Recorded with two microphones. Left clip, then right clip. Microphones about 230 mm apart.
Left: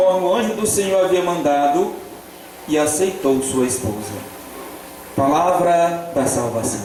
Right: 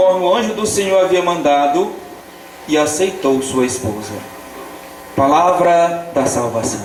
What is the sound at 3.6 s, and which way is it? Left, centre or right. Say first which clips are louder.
Speech: right 3 dB; centre.